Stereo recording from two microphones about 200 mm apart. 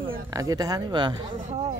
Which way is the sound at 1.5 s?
35° right (ahead or behind).